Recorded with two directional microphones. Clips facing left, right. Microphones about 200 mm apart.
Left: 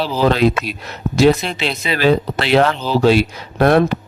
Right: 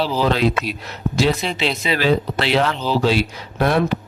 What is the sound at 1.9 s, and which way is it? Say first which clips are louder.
Speech: left 4 dB; 50° left (ahead or behind).